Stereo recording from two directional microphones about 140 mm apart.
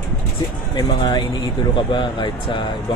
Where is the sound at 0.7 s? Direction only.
35° left (ahead or behind).